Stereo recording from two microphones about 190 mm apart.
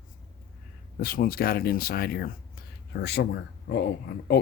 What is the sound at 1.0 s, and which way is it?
Speech, 50° left (ahead or behind).